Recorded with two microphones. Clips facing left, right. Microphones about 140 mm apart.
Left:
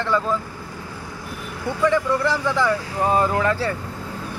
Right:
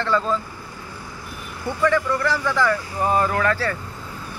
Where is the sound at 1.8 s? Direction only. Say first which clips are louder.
Left 1 dB; 20° left (ahead or behind).